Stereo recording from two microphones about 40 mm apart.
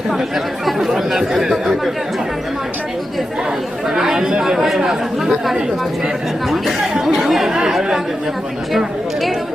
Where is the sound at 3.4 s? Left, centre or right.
Centre.